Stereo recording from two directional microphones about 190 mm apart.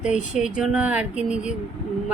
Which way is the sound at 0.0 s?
35° left (ahead or behind).